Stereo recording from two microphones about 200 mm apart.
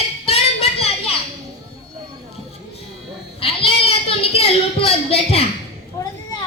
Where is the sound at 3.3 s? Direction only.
30° left (ahead or behind).